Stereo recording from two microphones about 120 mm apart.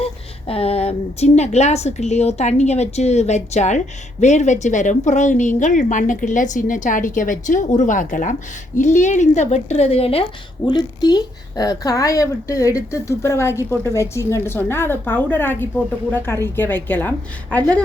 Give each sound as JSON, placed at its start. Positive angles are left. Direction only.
{"t": 0.0, "sound": "a woman's voice", "side_deg": 55}
{"t": 10.7, "sound": "a woman's voice", "side_deg": 35}